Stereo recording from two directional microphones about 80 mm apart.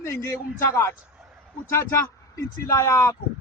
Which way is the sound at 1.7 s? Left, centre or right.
Left.